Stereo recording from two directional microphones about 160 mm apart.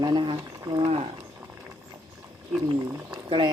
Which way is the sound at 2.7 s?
30° right (ahead or behind).